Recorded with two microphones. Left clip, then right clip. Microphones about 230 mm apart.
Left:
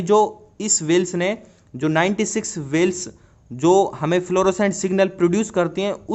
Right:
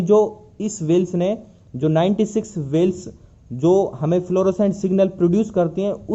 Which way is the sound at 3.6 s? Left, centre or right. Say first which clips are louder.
Left 1 dB; left.